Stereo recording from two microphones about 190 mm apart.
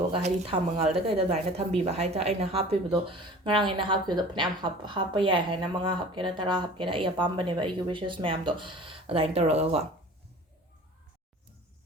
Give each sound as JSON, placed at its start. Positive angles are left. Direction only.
{"t": 0.1, "sound": "speech", "side_deg": -30}